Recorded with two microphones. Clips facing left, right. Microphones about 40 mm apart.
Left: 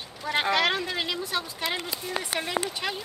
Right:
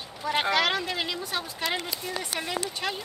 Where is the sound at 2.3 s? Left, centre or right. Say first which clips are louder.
Left 4 dB; centre.